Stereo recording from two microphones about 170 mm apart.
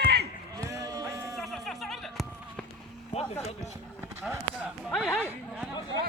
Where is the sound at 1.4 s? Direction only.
Centre (ahead or behind).